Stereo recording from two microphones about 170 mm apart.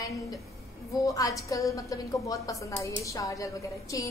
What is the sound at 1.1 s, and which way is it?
A woman's voice, 20° left (ahead or behind).